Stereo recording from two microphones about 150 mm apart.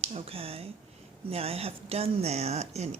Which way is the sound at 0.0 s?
40° right (ahead or behind).